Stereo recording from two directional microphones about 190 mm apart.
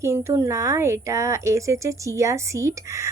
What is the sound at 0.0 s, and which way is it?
A woman's voice, 15° right (ahead or behind).